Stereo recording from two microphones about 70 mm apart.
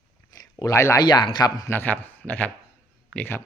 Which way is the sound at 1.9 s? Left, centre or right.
Left.